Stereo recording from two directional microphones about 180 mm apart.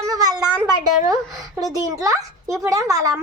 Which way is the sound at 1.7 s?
20° right (ahead or behind).